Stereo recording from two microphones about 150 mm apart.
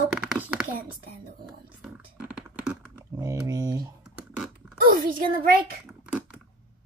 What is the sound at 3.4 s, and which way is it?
Typing, 25° right (ahead or behind).